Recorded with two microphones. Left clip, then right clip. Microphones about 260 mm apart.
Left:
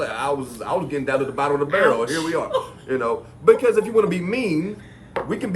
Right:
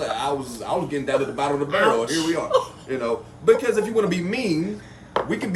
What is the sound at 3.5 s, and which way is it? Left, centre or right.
A man's voice, centre.